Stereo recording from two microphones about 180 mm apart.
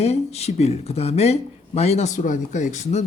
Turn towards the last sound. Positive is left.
turn(degrees=40)  # may be behind; listen again after turning